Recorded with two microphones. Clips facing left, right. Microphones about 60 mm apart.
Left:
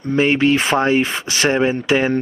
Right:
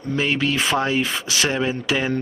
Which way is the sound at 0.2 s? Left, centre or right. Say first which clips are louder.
Left 7 dB; left.